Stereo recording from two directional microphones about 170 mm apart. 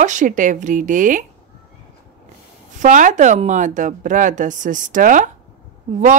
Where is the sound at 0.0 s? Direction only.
45° right (ahead or behind).